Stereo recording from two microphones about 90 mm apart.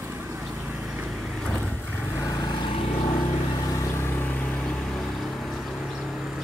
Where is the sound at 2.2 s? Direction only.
45° left (ahead or behind).